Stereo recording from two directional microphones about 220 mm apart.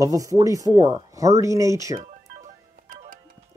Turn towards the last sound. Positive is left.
turn(degrees=-35)  # may be behind; listen again after turning